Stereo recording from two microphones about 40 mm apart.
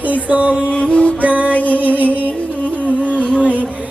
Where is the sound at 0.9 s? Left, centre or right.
Left.